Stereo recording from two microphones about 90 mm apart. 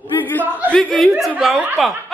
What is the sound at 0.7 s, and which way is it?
Speech, 10° left (ahead or behind).